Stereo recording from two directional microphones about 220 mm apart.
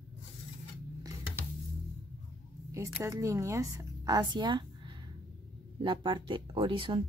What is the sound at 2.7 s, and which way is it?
Speech, 10° right (ahead or behind).